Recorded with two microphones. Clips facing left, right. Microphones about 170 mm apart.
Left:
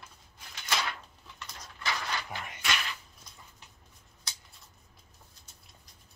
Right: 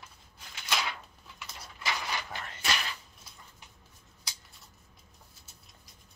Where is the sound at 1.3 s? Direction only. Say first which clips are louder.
Even; 10° right (ahead or behind).